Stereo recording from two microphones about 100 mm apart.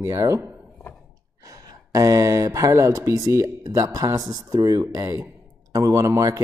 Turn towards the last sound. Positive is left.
turn(degrees=-35)  # may be behind; listen again after turning